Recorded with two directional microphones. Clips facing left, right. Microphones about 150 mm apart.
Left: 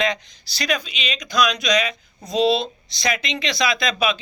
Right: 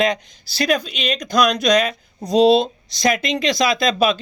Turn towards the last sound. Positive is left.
turn(degrees=-45)  # may be behind; listen again after turning